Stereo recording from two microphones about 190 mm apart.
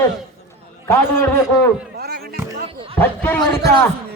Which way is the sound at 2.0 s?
55° right (ahead or behind).